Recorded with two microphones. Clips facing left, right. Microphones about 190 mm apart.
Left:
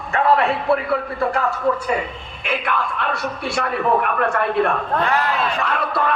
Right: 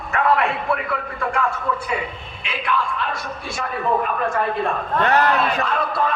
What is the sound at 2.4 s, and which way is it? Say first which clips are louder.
A man's voice: left 1 dB; 55° left (ahead or behind).